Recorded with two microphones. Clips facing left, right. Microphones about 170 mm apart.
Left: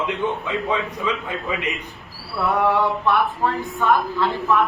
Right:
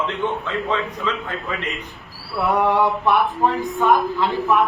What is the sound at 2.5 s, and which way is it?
Speech, 15° right (ahead or behind).